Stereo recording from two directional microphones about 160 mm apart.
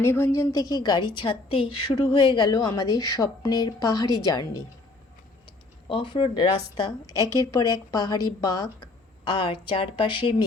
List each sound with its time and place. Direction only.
0.0 s a woman's voice: 15° left (ahead or behind)
5.9 s a woman's voice: 30° left (ahead or behind)